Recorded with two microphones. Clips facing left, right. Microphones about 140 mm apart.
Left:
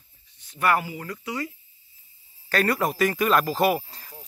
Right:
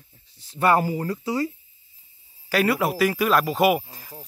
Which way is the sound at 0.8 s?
35° right (ahead or behind).